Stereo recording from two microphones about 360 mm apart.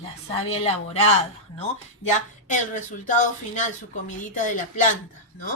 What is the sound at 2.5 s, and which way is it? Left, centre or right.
A woman's voice, left.